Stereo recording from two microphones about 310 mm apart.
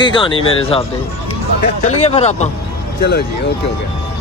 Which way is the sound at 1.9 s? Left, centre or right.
Left.